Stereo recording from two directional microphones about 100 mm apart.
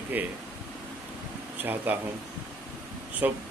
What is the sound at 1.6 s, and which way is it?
Speech, 20° right (ahead or behind).